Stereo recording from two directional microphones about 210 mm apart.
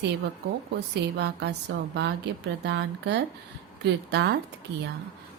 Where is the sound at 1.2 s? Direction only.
55° right (ahead or behind).